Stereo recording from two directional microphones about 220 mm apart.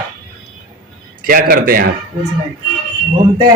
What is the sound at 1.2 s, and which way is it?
Speech, 40° right (ahead or behind).